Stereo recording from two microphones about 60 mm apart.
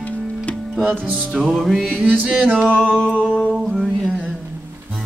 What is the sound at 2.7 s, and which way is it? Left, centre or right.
Music, centre.